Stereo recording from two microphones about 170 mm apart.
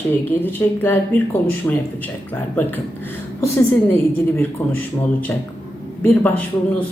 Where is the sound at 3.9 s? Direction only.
10° left (ahead or behind).